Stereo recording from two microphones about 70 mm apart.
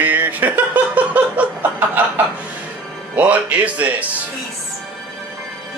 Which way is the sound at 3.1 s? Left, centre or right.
Right.